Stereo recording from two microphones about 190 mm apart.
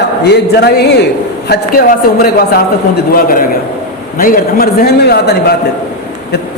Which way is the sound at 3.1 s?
50° left (ahead or behind).